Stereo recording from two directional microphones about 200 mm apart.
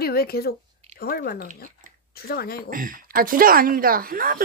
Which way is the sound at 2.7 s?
45° right (ahead or behind).